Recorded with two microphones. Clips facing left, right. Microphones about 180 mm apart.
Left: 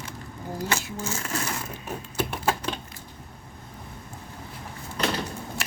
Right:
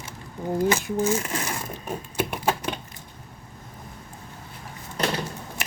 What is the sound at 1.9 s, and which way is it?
Typewriter, 10° right (ahead or behind).